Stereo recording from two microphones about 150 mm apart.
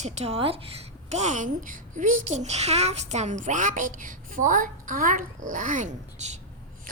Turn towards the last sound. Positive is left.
turn(degrees=-55)  # may be behind; listen again after turning